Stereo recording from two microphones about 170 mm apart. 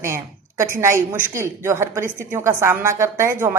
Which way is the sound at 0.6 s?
15° right (ahead or behind).